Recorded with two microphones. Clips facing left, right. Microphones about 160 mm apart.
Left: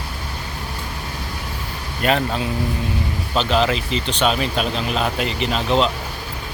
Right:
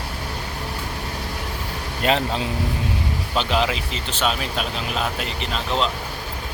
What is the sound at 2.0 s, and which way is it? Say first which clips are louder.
Speech: left 2 dB; 20° right (ahead or behind).